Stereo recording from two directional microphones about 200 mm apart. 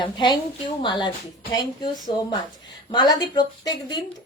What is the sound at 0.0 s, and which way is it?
A woman's voice, 25° left (ahead or behind).